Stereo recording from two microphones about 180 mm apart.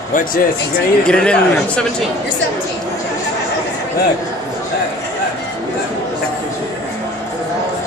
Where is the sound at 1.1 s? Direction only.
5° left (ahead or behind).